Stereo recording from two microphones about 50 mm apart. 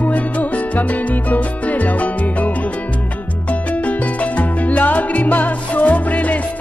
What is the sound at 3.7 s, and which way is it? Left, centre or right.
Music, left.